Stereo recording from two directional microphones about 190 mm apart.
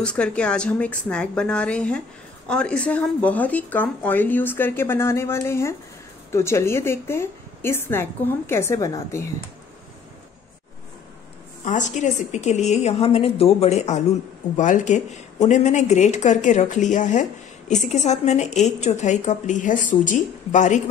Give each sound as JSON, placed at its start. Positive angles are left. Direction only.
{"t": 0.0, "sound": "a woman's voice", "side_deg": 5}
{"t": 11.6, "sound": "speech", "side_deg": 40}